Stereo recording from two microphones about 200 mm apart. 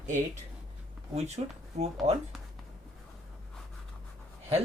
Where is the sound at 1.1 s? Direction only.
35° right (ahead or behind).